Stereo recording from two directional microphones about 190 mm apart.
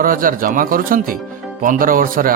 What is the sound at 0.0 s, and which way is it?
Speech, 45° right (ahead or behind).